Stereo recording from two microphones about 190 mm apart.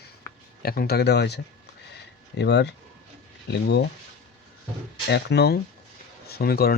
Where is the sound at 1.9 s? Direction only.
60° left (ahead or behind).